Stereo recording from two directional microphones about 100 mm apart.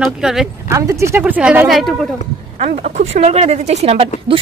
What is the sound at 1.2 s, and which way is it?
Speech, 15° right (ahead or behind).